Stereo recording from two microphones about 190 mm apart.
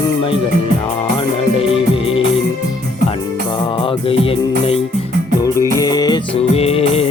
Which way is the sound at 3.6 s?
30° left (ahead or behind).